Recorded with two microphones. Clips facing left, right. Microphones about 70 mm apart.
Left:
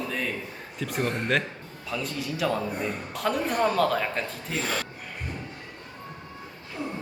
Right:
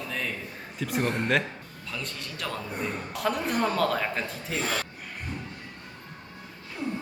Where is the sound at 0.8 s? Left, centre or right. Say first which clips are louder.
Right 1 dB; centre.